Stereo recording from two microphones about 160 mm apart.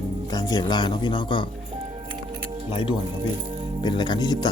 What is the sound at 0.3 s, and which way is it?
Speech, 25° left (ahead or behind).